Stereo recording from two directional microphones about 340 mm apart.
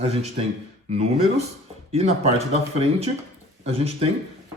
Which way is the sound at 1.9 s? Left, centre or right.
Centre.